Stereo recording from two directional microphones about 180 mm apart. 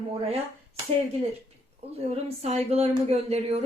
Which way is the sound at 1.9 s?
35° right (ahead or behind).